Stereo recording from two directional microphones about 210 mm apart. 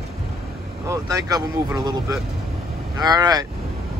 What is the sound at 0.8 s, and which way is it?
Speech, 15° right (ahead or behind).